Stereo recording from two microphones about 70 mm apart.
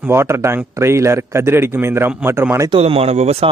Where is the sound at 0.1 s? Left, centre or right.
Right.